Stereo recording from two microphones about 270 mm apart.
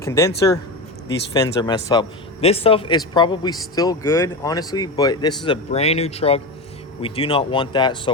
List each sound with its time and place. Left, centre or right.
0.0 s speech: centre